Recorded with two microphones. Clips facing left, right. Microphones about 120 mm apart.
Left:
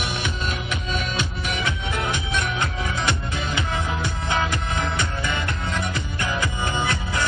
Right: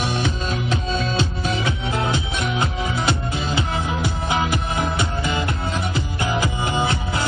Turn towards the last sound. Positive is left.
turn(degrees=-25)  # may be behind; listen again after turning